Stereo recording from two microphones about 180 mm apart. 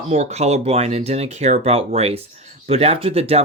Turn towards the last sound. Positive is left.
turn(degrees=-35)  # may be behind; listen again after turning